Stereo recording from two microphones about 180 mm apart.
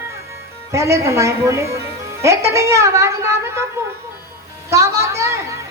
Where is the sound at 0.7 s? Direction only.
15° right (ahead or behind).